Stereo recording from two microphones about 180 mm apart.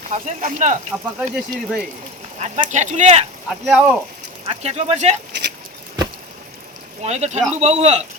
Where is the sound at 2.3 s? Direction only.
40° right (ahead or behind).